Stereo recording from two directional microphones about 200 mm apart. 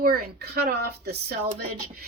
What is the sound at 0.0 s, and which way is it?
A woman's voice, 50° right (ahead or behind).